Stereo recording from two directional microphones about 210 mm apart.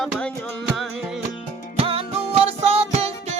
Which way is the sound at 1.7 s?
30° right (ahead or behind).